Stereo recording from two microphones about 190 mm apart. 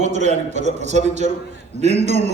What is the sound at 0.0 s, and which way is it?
A man's voice, 35° right (ahead or behind).